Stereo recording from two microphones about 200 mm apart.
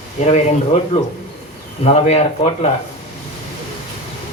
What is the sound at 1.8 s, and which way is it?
Speech, 30° left (ahead or behind).